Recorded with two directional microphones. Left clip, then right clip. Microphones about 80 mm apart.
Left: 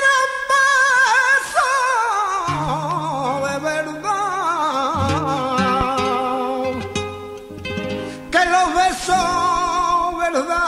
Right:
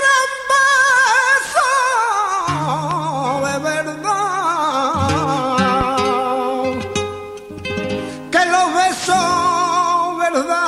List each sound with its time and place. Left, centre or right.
0.0 s music: left
8.3 s music: left